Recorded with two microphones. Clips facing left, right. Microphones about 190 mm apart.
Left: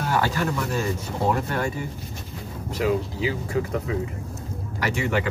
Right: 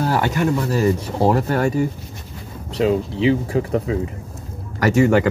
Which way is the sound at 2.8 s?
25° right (ahead or behind).